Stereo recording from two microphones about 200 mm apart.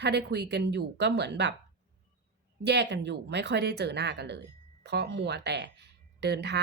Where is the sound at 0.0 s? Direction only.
55° right (ahead or behind).